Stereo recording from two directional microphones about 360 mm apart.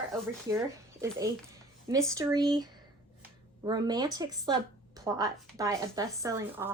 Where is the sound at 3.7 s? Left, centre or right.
Centre.